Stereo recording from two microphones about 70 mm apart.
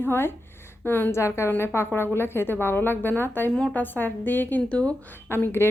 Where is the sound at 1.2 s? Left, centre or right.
Left.